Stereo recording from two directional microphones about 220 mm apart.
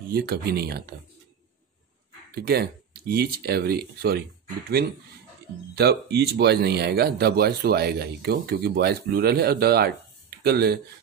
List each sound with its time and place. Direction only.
0.1 s speech: 45° right (ahead or behind)
2.3 s speech: 45° right (ahead or behind)
5.8 s speech: 45° right (ahead or behind)